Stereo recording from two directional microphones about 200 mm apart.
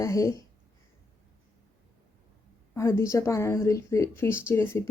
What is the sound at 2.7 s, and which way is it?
Speech, 15° left (ahead or behind).